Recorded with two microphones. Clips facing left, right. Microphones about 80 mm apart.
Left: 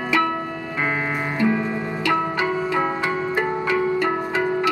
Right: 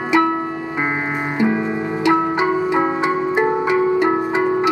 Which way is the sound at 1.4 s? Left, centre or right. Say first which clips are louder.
Right 3 dB; right.